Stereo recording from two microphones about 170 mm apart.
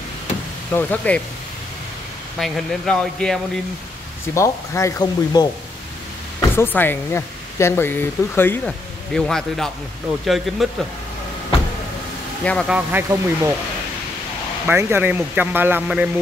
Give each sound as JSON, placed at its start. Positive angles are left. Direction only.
{"t": 0.7, "sound": "speech", "side_deg": 10}
{"t": 2.3, "sound": "speech", "side_deg": 0}
{"t": 4.3, "sound": "speech", "side_deg": 15}
{"t": 12.4, "sound": "speech", "side_deg": 5}
{"t": 12.7, "sound": "speech", "side_deg": -15}
{"t": 14.7, "sound": "speech", "side_deg": -15}